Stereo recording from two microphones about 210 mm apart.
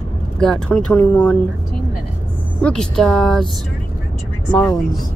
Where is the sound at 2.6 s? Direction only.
5° left (ahead or behind).